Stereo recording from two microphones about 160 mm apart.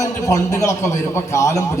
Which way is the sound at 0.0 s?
20° left (ahead or behind).